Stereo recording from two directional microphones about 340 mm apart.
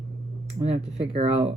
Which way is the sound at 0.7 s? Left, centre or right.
Centre.